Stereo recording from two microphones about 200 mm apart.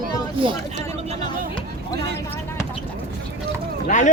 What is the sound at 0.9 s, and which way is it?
Vehicle, 30° right (ahead or behind).